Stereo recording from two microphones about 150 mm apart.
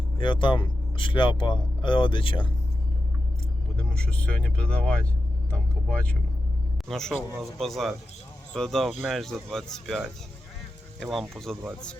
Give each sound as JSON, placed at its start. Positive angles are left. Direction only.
{"t": 0.2, "sound": "speech", "side_deg": 35}
{"t": 3.8, "sound": "speech", "side_deg": 5}